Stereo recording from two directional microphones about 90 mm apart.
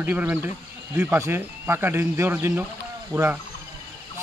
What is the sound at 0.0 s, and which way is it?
Speech, 20° right (ahead or behind).